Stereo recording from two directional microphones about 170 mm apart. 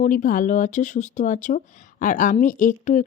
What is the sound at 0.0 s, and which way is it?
Speech, 50° left (ahead or behind).